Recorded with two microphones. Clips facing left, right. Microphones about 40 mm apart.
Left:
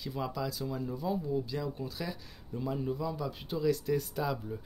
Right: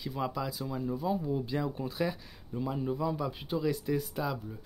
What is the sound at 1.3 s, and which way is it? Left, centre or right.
Speech, right.